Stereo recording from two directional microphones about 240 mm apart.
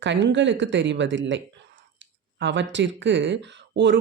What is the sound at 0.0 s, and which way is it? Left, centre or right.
Speech, right.